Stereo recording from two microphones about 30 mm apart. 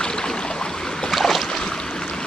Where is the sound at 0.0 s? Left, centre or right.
Left.